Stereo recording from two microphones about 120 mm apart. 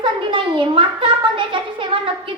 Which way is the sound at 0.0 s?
45° right (ahead or behind).